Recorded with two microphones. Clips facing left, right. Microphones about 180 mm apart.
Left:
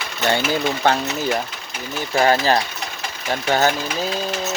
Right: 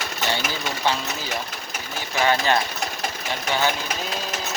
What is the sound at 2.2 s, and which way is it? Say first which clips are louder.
Speech: left 4 dB; 40° left (ahead or behind).